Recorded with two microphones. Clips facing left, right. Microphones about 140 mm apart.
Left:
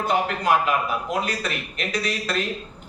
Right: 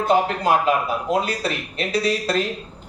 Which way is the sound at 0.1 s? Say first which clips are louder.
Right 3 dB; 30° right (ahead or behind).